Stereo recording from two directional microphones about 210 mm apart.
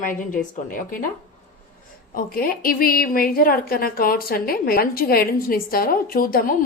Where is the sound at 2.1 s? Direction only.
45° left (ahead or behind).